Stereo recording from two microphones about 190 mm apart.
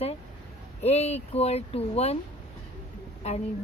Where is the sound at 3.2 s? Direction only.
35° left (ahead or behind).